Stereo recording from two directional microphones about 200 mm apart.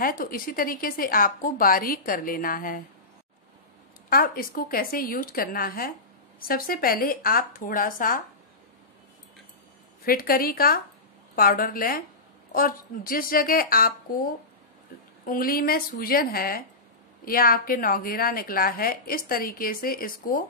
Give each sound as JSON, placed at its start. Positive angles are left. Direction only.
{"t": 0.0, "sound": "a woman's voice", "side_deg": 45}
{"t": 4.1, "sound": "a woman's voice", "side_deg": 45}
{"t": 10.0, "sound": "a woman's voice", "side_deg": 45}